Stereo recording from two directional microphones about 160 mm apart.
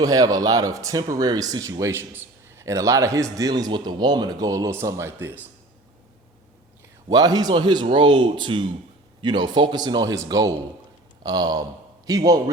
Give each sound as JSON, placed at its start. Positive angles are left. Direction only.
{"t": 0.0, "sound": "speech", "side_deg": -20}
{"t": 7.1, "sound": "speech", "side_deg": -25}